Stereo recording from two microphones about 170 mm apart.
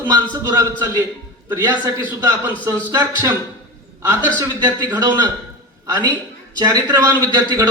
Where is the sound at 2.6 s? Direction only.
15° right (ahead or behind).